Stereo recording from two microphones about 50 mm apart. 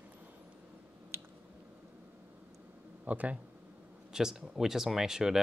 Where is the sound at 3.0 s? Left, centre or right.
Right.